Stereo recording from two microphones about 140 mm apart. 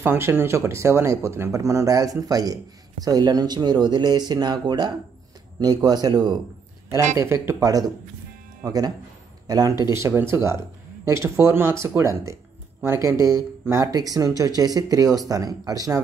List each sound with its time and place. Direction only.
0.0 s speech: 15° right (ahead or behind)
7.2 s speech: 20° right (ahead or behind)